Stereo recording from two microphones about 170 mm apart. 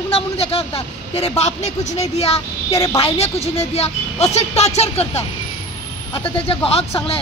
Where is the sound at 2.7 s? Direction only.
20° left (ahead or behind).